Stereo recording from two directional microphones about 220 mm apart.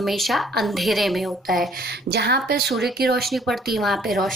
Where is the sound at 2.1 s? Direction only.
50° right (ahead or behind).